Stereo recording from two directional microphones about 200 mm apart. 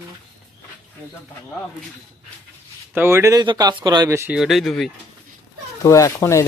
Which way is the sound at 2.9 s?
10° right (ahead or behind).